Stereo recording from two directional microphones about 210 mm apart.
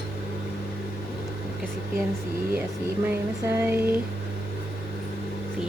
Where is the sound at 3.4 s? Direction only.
10° right (ahead or behind).